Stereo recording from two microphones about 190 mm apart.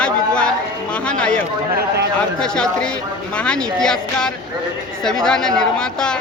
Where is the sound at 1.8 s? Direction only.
60° right (ahead or behind).